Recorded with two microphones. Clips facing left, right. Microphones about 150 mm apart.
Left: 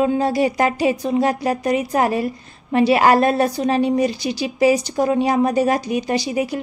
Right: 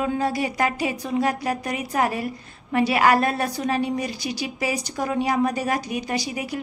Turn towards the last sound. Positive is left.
turn(degrees=30)  # may be behind; listen again after turning